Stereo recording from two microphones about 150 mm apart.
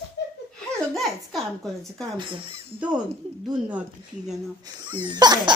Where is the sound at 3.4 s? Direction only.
5° right (ahead or behind).